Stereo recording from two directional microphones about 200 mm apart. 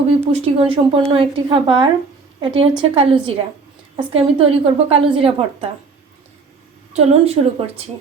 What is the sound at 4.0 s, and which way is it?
A woman's voice, 30° right (ahead or behind).